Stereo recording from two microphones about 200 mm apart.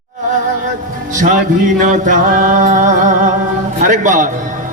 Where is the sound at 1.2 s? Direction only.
40° right (ahead or behind).